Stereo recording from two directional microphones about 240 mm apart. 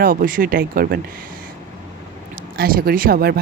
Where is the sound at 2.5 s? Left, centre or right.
Right.